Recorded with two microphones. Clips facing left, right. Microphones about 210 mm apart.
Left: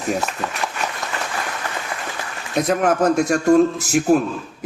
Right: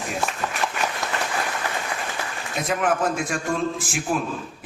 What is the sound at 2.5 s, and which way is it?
A man's voice, 40° left (ahead or behind).